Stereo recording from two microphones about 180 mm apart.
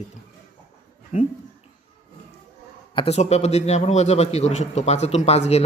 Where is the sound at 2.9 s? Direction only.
35° left (ahead or behind).